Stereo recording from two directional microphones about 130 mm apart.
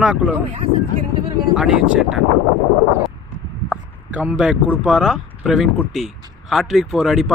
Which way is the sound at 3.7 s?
10° right (ahead or behind).